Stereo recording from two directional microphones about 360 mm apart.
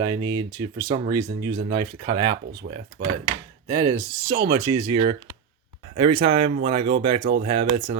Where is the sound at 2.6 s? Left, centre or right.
Right.